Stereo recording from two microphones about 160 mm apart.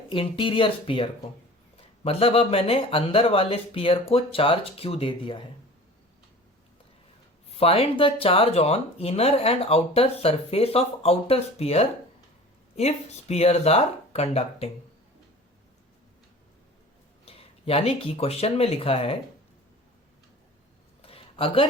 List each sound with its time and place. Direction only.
0.1 s speech: 35° left (ahead or behind)
7.5 s speech: 40° left (ahead or behind)
17.2 s speech: 35° left (ahead or behind)
21.0 s a sound: 35° left (ahead or behind)